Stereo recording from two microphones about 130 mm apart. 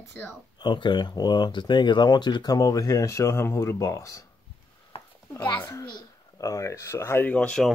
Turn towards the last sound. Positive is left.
turn(degrees=5)  # may be behind; listen again after turning